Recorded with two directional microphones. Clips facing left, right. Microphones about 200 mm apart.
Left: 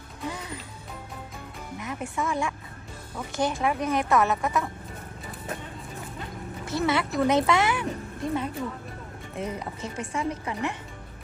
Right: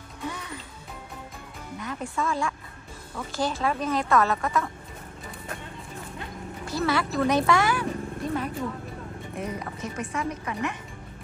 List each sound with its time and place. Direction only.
0.3 s music: 30° left (ahead or behind)
1.8 s speech: 20° left (ahead or behind)
6.6 s speech: 20° left (ahead or behind)